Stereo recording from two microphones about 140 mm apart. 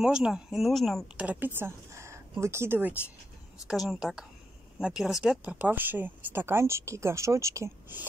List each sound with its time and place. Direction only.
0.0 s speech: 5° right (ahead or behind)
1.1 s speech: 10° right (ahead or behind)
3.6 s speech: centre (ahead or behind); by 8.0 s 20° right (ahead or behind)